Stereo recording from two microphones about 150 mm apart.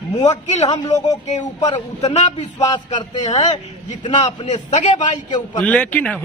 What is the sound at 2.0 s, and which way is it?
Speech, 45° left (ahead or behind).